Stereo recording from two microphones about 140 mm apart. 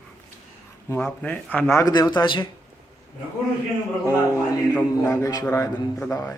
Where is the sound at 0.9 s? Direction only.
10° left (ahead or behind); by 2.4 s 35° left (ahead or behind).